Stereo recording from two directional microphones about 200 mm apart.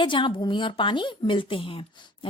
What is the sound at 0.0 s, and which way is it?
A woman's voice, 25° left (ahead or behind).